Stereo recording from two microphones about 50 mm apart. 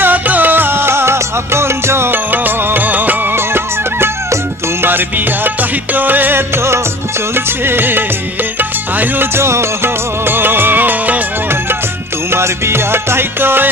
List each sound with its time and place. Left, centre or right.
0.0 s music: right
4.8 s music: right
9.4 s music: right
12.3 s music: right